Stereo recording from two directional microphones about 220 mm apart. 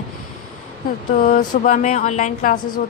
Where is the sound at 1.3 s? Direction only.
35° left (ahead or behind).